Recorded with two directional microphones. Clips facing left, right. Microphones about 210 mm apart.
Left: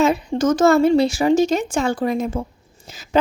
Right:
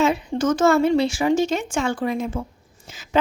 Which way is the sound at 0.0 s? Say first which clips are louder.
Left 3 dB; 40° left (ahead or behind).